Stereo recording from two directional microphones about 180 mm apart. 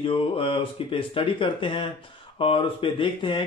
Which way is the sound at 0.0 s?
30° left (ahead or behind).